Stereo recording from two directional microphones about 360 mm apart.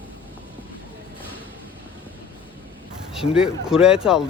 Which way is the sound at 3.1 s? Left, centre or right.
Centre.